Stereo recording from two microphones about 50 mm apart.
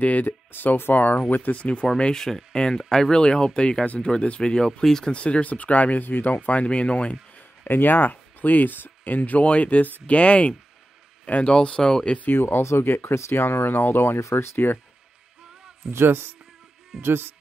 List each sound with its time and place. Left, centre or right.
0.0 s speech: left
0.7 s speech: left
1.6 s speech: left
5.1 s speech: left
7.6 s speech: left; by 12.2 s centre
12.4 s speech: left
14.3 s speech: left
15.9 s a man's voice: right